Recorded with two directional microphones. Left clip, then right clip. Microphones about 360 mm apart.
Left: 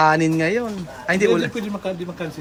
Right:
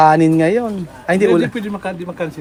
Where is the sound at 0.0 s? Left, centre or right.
Centre.